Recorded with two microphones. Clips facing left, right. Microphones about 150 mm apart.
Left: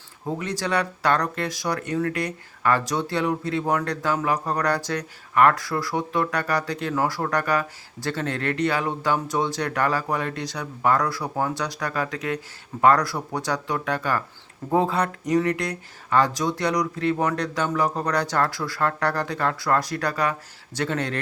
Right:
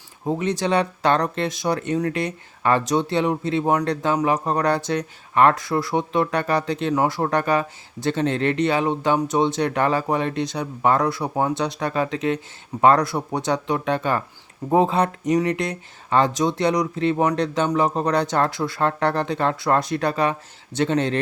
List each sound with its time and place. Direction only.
0.3 s speech: 20° right (ahead or behind)